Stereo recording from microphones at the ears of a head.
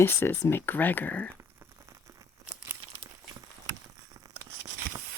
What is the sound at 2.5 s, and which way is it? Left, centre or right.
Crumpling, right.